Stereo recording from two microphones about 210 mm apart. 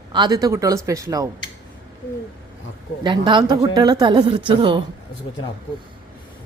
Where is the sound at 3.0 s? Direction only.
20° right (ahead or behind).